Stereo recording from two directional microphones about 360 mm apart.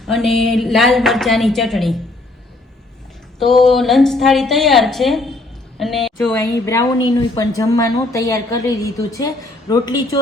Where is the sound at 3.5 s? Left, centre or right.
Centre.